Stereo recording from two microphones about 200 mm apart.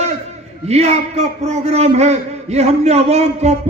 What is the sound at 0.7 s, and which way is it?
A man's voice, 30° right (ahead or behind).